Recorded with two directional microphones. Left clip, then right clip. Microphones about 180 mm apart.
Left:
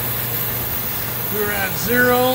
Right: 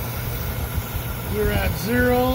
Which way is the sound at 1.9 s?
30° right (ahead or behind).